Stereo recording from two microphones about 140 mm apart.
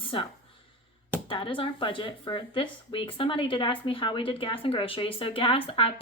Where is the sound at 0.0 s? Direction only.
35° left (ahead or behind).